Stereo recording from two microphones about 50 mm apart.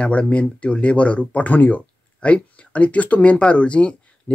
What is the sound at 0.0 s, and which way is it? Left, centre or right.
Speech, left.